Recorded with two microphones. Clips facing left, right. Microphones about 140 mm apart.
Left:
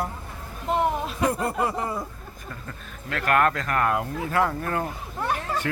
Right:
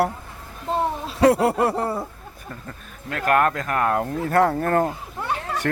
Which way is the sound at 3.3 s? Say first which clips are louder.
Right 2 dB; 5° right (ahead or behind).